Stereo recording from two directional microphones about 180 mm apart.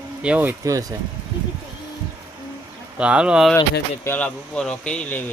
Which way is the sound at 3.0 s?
5° right (ahead or behind).